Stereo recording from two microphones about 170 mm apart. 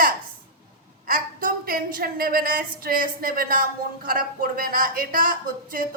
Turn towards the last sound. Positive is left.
turn(degrees=-55)  # may be behind; listen again after turning